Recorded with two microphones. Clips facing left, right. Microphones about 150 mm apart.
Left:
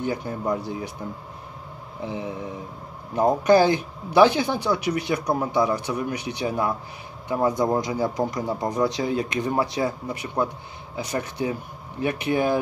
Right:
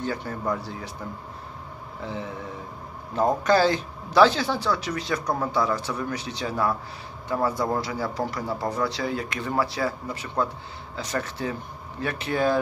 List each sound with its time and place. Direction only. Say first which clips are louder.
0.0 s speech: left 2 dB; 15° left (ahead or behind)
2.0 s speech: left 3 dB; 15° left (ahead or behind)